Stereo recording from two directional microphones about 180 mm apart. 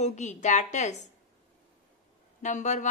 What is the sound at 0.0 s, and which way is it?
Speech, 40° left (ahead or behind).